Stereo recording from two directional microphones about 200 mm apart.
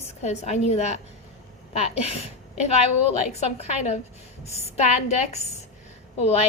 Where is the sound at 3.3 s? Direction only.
30° left (ahead or behind).